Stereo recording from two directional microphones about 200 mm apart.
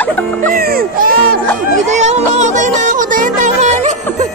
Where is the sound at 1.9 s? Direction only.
35° right (ahead or behind).